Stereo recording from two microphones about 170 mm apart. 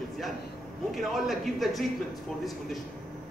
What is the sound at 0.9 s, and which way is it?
Speech, centre (ahead or behind).